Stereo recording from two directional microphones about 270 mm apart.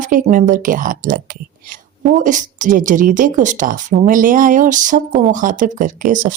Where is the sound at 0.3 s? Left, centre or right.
Right.